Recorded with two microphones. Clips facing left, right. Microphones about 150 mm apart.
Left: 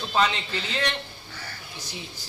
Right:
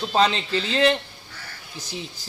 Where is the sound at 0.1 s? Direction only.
35° right (ahead or behind).